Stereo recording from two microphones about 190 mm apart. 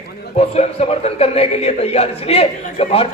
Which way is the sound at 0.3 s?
35° left (ahead or behind).